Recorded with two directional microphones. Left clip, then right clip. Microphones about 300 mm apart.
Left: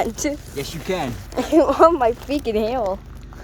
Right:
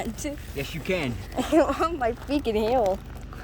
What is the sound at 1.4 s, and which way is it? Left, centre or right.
A woman's voice, centre.